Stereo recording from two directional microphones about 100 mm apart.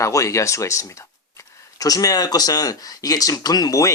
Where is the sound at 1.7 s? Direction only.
35° left (ahead or behind).